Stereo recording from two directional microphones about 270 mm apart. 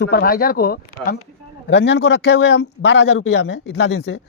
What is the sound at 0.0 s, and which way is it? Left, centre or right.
Speech, left.